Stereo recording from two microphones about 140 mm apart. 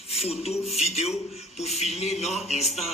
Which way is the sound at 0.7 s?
50° left (ahead or behind).